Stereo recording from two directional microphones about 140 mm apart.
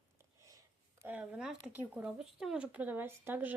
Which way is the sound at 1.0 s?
10° right (ahead or behind).